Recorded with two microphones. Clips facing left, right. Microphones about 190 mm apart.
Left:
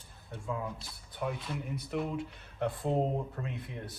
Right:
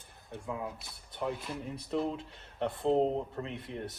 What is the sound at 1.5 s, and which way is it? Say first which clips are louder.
Speech: right 1 dB; 30° right (ahead or behind).